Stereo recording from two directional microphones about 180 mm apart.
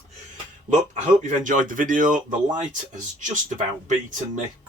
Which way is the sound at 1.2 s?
45° right (ahead or behind).